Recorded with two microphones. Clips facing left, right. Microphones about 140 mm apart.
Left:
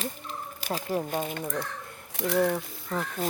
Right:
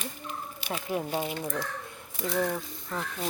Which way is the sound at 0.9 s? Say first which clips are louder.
Even; 5° right (ahead or behind).